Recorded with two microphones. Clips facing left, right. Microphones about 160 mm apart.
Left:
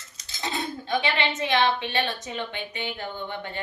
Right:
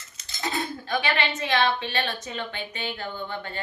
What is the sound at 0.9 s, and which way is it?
A woman's voice, 20° left (ahead or behind).